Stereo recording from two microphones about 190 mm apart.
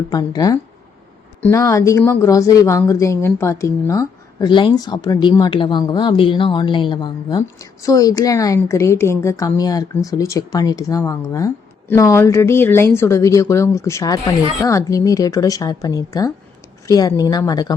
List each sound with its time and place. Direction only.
0.1 s a woman's voice: 20° left (ahead or behind)